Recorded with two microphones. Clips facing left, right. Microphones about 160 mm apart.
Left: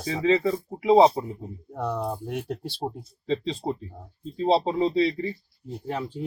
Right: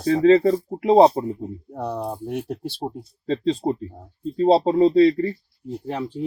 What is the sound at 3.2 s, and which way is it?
Speech, 50° right (ahead or behind).